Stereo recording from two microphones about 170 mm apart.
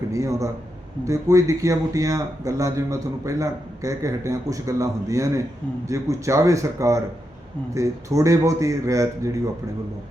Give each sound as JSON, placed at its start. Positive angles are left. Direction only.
{"t": 0.1, "sound": "a man's voice", "side_deg": -20}